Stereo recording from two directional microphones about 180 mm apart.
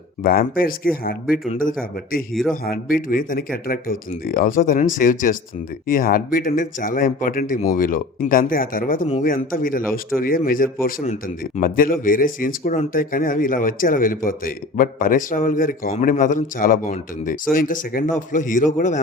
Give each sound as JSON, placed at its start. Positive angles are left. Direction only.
{"t": 0.2, "sound": "speech", "side_deg": 55}
{"t": 11.6, "sound": "speech", "side_deg": 50}